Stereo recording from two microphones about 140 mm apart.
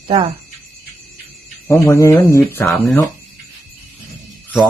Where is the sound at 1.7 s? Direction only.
20° left (ahead or behind).